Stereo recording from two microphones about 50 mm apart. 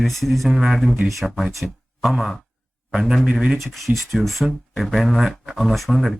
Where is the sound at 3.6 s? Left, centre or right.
Centre.